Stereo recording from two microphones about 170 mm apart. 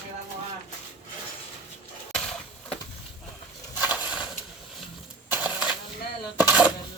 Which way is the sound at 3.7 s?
10° right (ahead or behind).